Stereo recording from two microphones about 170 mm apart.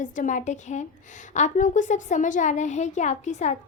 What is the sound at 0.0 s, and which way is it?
A woman's voice, 50° left (ahead or behind).